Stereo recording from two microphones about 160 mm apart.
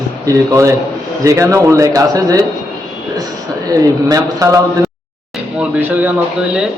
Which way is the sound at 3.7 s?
20° right (ahead or behind).